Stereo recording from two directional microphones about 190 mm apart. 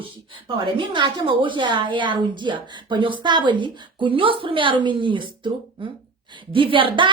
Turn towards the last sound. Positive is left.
turn(degrees=-25)  # may be behind; listen again after turning